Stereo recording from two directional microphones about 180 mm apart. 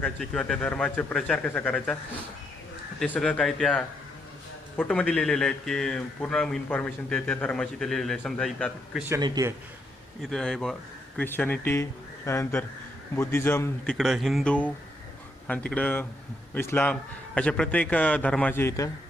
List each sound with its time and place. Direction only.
0.0 s speech: 5° left (ahead or behind)
3.0 s speech: 5° left (ahead or behind)
9.0 s speech: 20° right (ahead or behind)
10.2 s a man's voice: 5° left (ahead or behind)
13.9 s a man's voice: centre (ahead or behind)